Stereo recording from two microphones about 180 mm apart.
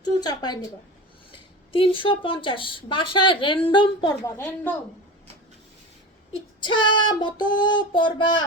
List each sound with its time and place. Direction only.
0.0 s speech: 20° left (ahead or behind)
1.7 s speech: 30° left (ahead or behind)
4.4 s a woman's voice: 10° left (ahead or behind)
6.6 s speech: 25° left (ahead or behind)